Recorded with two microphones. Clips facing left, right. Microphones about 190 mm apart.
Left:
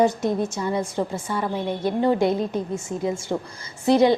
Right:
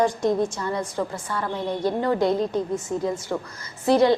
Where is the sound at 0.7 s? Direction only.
20° left (ahead or behind).